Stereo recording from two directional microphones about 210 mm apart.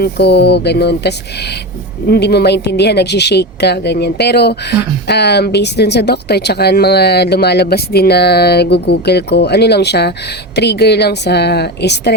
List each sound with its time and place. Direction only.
0.0 s a woman's voice: 50° left (ahead or behind)